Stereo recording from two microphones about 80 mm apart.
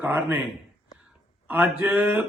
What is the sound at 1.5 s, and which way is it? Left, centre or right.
Speech, centre.